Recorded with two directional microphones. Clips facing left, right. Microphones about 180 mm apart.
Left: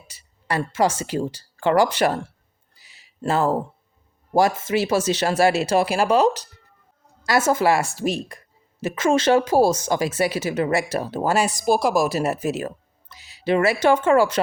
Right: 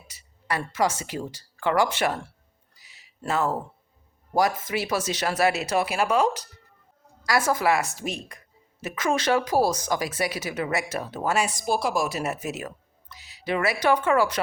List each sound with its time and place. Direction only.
0.1 s speech: 30° left (ahead or behind)
2.7 s a sound: 30° left (ahead or behind)
4.4 s speech: 25° left (ahead or behind)